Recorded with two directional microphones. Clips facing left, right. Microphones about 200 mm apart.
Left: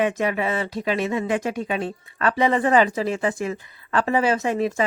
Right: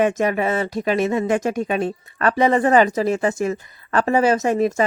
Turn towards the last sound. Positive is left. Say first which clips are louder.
# right 4 dB
turn(degrees=-45)  # may be behind; listen again after turning